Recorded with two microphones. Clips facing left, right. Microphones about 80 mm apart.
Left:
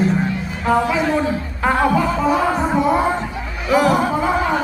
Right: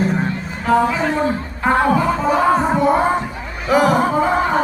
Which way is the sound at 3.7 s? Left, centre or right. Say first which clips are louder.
Right 1 dB; right.